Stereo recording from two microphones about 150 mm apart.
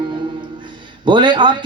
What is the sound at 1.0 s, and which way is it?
Speech, 30° right (ahead or behind).